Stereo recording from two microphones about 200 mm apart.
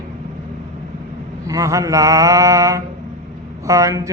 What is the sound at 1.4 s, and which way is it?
Mantra, 15° right (ahead or behind).